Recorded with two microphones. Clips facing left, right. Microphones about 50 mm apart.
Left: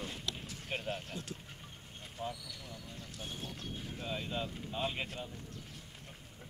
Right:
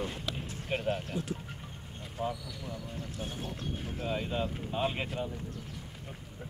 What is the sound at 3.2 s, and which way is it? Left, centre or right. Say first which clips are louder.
Speech: right 4 dB; right.